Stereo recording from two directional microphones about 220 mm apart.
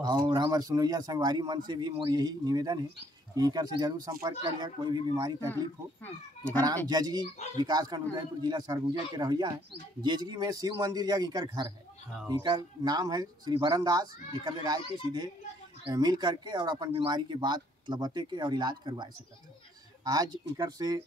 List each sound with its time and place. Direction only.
0.0 s speech: 20° right (ahead or behind)
6.0 s speech: 10° left (ahead or behind)
6.9 s speech: 20° right (ahead or behind)
20.1 s speech: 15° right (ahead or behind)